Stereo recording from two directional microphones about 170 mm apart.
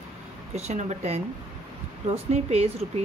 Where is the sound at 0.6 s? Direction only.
40° right (ahead or behind).